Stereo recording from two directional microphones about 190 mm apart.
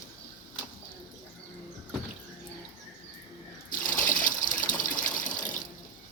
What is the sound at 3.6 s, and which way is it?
Water, 45° left (ahead or behind).